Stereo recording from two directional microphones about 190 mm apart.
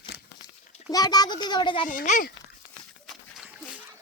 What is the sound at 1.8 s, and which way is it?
Speech, 40° left (ahead or behind).